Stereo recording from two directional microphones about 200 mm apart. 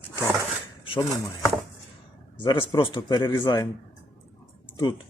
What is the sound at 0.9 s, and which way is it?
A man's voice, 20° left (ahead or behind).